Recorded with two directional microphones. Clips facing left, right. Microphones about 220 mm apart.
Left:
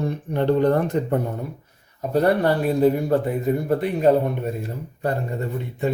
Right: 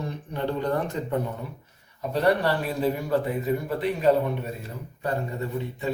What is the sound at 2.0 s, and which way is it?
A man's voice, 45° left (ahead or behind).